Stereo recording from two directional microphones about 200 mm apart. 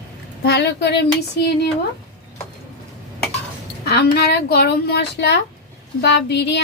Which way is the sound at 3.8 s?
55° left (ahead or behind).